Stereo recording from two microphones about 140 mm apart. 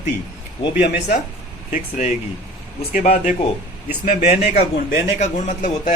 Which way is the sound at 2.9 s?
60° left (ahead or behind).